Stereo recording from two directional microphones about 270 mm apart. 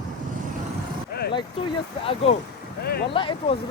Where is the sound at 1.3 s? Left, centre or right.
Centre.